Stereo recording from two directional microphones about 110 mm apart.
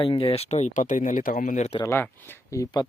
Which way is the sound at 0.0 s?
55° left (ahead or behind).